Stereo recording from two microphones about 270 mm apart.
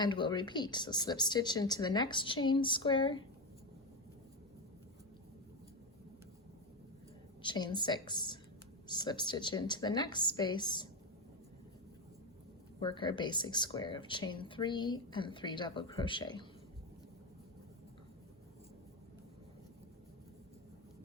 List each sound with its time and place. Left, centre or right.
0.0 s speech: centre
7.4 s speech: centre
12.8 s speech: centre